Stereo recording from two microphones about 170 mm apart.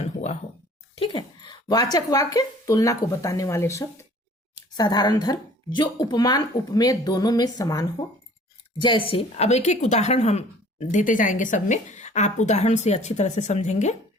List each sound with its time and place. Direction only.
0.0 s speech: 40° left (ahead or behind)
0.9 s a woman's voice: 30° left (ahead or behind)